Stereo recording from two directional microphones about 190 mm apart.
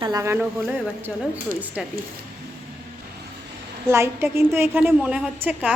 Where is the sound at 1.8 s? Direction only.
5° right (ahead or behind).